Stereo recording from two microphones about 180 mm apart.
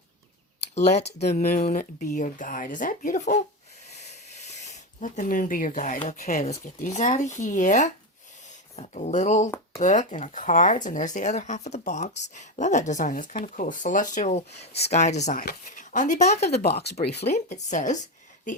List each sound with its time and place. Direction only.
0.8 s speech: 40° left (ahead or behind)
3.9 s a sound: 40° left (ahead or behind)
6.8 s speech: 45° left (ahead or behind)
16.6 s speech: 60° left (ahead or behind)
17.2 s speech: 40° left (ahead or behind)